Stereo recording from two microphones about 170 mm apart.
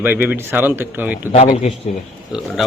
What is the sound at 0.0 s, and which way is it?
A man's voice, 10° right (ahead or behind).